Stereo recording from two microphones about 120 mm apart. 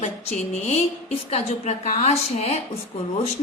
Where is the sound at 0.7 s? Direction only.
60° left (ahead or behind).